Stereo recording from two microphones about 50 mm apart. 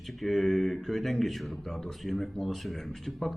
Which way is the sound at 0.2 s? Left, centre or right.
Centre.